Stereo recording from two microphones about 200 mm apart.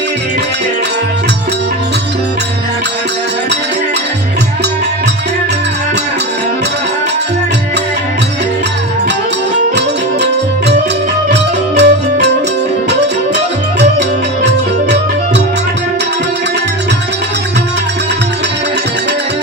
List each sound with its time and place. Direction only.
11.8 s music: 55° right (ahead or behind)